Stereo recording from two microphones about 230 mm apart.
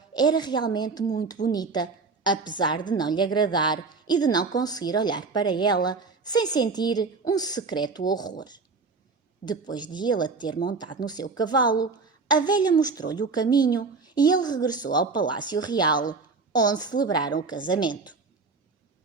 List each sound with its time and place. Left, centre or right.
0.1 s a woman's voice: centre